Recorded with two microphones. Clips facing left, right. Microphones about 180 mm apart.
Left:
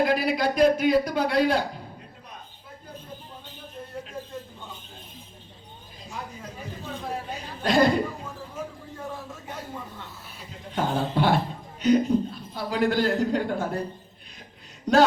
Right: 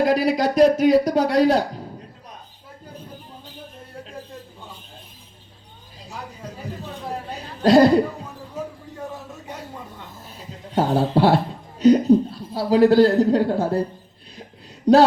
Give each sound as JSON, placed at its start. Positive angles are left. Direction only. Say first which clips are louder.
{"t": 0.0, "sound": "speech", "louder": "right 4 dB", "side_deg": -40}
{"t": 7.3, "sound": "chuckle", "louder": "right 11 dB", "side_deg": -35}
{"t": 10.2, "sound": "a sound", "louder": "right 3 dB", "side_deg": -35}
{"t": 11.1, "sound": "speech", "louder": "right 6 dB", "side_deg": -35}
{"t": 14.9, "sound": "speech", "louder": "right 6 dB", "side_deg": -35}